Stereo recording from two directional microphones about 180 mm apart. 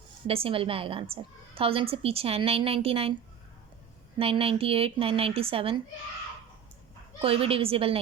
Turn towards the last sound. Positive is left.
turn(degrees=-30)  # may be behind; listen again after turning